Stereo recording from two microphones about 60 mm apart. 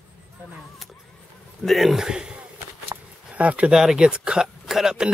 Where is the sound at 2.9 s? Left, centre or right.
Right.